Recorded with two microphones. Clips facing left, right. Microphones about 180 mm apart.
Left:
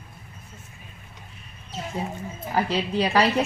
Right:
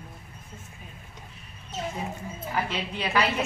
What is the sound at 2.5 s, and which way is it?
Speech, 35° left (ahead or behind).